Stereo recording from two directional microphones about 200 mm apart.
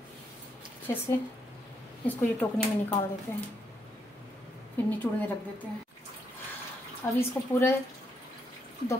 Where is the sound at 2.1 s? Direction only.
10° left (ahead or behind).